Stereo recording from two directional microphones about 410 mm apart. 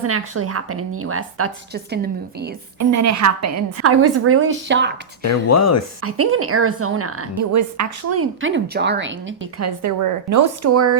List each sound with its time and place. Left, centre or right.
0.0 s a woman's voice: right
2.7 s a woman's voice: right
5.2 s speech: left
6.0 s a woman's voice: right